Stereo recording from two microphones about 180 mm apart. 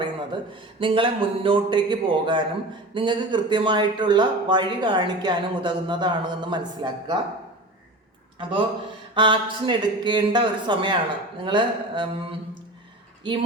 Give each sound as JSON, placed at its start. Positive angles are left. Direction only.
{"t": 0.0, "sound": "speech", "side_deg": -25}
{"t": 8.4, "sound": "speech", "side_deg": -30}
{"t": 13.2, "sound": "speech", "side_deg": -25}